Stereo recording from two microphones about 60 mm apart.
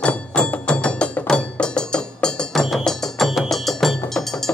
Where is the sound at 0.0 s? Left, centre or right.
Centre.